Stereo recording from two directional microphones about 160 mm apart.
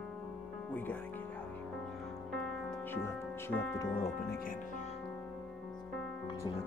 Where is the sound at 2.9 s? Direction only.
15° left (ahead or behind).